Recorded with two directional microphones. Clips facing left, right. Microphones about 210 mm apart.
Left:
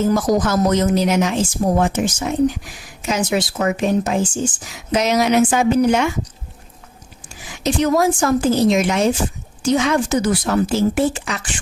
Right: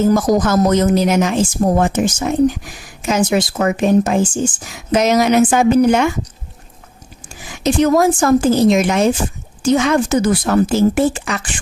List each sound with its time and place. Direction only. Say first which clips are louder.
0.1 s a woman's voice: right 3 dB; 50° right (ahead or behind)
7.6 s a woman's voice: right 4 dB; 50° right (ahead or behind)